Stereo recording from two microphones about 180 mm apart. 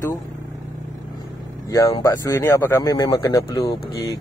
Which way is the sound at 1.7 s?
20° left (ahead or behind).